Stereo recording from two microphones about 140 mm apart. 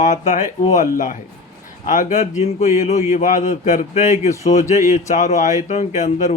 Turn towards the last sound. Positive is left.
turn(degrees=55)  # may be behind; listen again after turning